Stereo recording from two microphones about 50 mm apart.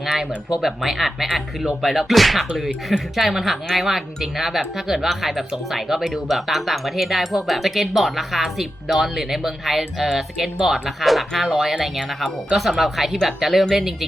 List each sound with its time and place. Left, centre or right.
0.0 s speech: centre